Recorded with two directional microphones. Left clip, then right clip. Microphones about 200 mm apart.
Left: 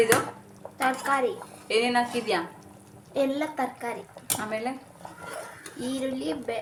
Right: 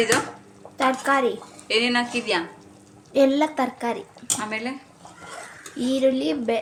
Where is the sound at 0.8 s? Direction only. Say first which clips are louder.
Right 5 dB; 60° right (ahead or behind).